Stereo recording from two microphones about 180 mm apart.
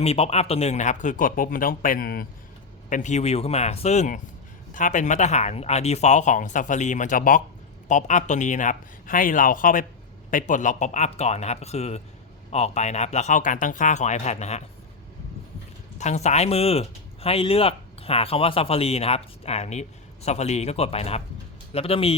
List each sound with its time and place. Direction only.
0.0 s speech: 35° left (ahead or behind); by 2.2 s 50° left (ahead or behind)
2.9 s speech: 40° left (ahead or behind)
16.0 s speech: 40° left (ahead or behind)